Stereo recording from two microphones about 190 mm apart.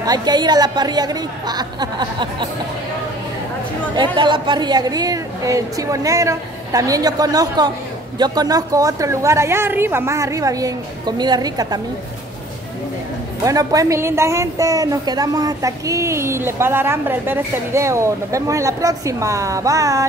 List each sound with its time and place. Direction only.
0.0 s speech: 20° right (ahead or behind)
3.9 s a woman's voice: 25° right (ahead or behind)
13.4 s a woman's voice: 20° right (ahead or behind)